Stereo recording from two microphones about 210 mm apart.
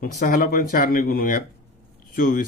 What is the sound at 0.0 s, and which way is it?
A man's voice, 45° left (ahead or behind).